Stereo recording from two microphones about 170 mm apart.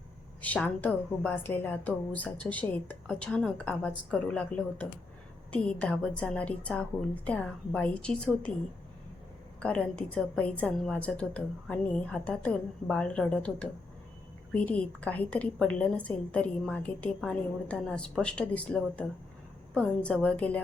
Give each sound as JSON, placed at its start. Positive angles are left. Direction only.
{"t": 0.4, "sound": "a woman's voice", "side_deg": 10}
{"t": 9.6, "sound": "a woman's voice", "side_deg": 5}